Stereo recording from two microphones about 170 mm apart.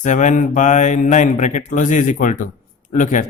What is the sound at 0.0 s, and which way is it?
Speech, 45° left (ahead or behind).